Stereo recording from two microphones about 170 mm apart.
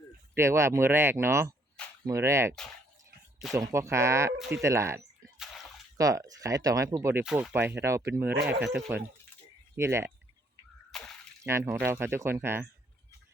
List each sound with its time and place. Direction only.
0.3 s speech: 15° right (ahead or behind)
4.4 s speech: 5° right (ahead or behind)
4.6 s speech: 15° right (ahead or behind)
5.4 s a sound: centre (ahead or behind)
6.0 s speech: 20° right (ahead or behind)
7.3 s speech: 5° right (ahead or behind)
10.9 s a sound: 5° left (ahead or behind)
11.4 s speech: 15° right (ahead or behind)